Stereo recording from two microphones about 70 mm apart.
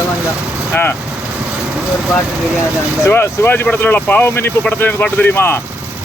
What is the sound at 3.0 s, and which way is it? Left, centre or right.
Speech, left.